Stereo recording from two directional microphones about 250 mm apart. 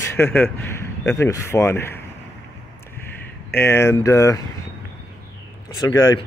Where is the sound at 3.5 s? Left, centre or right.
Centre.